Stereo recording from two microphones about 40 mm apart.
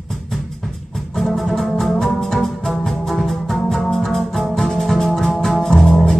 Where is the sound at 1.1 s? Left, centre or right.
Centre.